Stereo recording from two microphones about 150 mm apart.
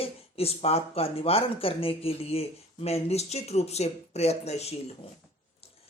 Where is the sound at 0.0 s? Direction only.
40° left (ahead or behind).